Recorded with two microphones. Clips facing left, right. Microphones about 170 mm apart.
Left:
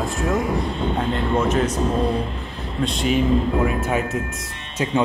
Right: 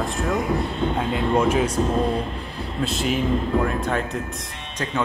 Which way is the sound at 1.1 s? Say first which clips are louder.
Right 2 dB; 5° right (ahead or behind).